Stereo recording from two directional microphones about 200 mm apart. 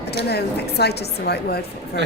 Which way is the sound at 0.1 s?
55° left (ahead or behind).